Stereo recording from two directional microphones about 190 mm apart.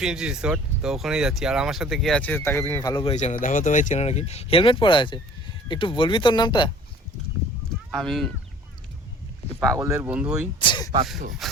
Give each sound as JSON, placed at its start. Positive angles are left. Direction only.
{"t": 0.0, "sound": "speech", "side_deg": -5}
{"t": 2.9, "sound": "speech", "side_deg": 30}
{"t": 7.9, "sound": "speech", "side_deg": 0}
{"t": 9.7, "sound": "speech", "side_deg": -15}
{"t": 10.6, "sound": "speech", "side_deg": 25}